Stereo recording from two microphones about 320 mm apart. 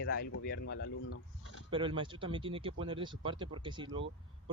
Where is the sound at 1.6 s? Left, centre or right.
Centre.